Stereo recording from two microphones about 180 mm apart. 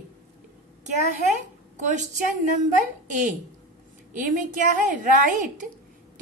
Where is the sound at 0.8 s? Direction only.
40° right (ahead or behind).